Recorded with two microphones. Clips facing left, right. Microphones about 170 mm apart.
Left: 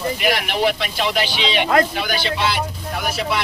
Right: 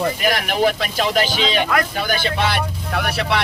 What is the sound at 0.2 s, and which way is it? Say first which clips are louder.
Speech: right 1 dB; 45° right (ahead or behind).